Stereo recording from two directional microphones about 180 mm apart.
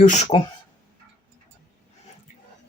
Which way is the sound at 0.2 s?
35° left (ahead or behind).